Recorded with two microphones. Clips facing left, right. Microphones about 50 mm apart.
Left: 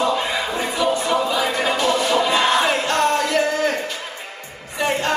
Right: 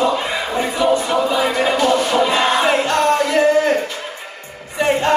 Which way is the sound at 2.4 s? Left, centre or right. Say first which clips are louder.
Right 2 dB; centre.